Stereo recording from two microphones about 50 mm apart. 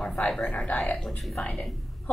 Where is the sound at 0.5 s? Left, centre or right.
Left.